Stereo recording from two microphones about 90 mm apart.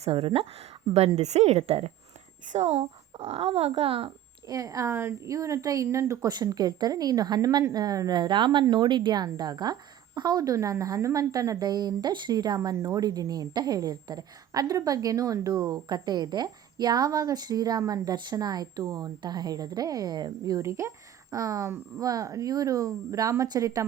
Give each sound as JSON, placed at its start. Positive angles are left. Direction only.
{"t": 0.1, "sound": "speech", "side_deg": -90}
{"t": 0.9, "sound": "a woman's voice", "side_deg": -45}
{"t": 3.3, "sound": "speech", "side_deg": -90}
{"t": 4.4, "sound": "a woman's voice", "side_deg": -40}
{"t": 6.2, "sound": "a woman's voice", "side_deg": -45}